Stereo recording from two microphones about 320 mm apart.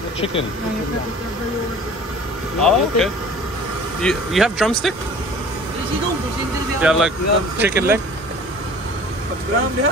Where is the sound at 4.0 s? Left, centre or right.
Centre.